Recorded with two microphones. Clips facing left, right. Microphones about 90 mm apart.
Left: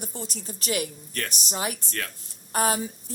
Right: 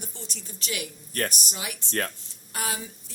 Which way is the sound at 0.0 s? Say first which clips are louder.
Left 6 dB; 40° left (ahead or behind).